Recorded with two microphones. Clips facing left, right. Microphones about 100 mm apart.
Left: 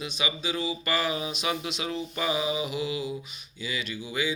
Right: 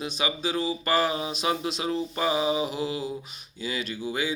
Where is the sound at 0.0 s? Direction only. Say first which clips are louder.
Right 3 dB; 40° right (ahead or behind).